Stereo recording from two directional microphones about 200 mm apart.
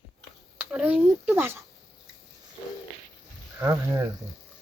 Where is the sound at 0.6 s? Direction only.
5° right (ahead or behind).